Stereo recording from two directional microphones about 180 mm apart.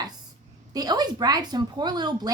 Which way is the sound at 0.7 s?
20° right (ahead or behind).